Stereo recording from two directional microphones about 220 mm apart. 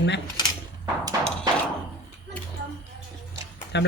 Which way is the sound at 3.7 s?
50° left (ahead or behind).